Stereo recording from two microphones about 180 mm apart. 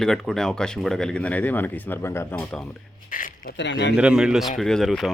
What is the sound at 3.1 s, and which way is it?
Speech, 50° left (ahead or behind).